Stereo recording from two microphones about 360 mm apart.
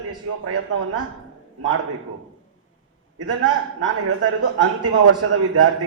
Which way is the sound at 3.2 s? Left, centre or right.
Right.